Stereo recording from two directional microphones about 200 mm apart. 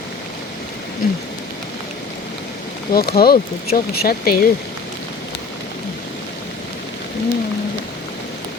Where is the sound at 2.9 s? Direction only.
50° left (ahead or behind).